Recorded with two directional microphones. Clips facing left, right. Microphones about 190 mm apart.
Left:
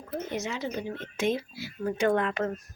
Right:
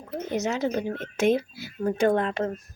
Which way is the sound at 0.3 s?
40° right (ahead or behind).